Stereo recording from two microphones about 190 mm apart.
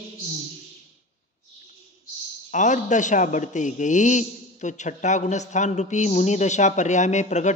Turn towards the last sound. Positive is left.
turn(degrees=40)  # may be behind; listen again after turning